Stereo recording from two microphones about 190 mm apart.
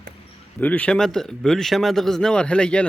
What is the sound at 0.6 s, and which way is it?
A man's voice, 10° left (ahead or behind).